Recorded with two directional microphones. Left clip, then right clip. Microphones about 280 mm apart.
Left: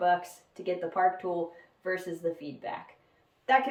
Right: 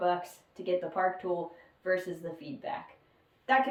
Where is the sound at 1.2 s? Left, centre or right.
Left.